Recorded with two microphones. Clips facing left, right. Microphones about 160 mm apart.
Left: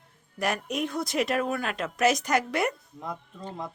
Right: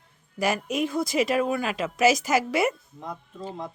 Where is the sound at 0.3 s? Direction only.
Centre (ahead or behind).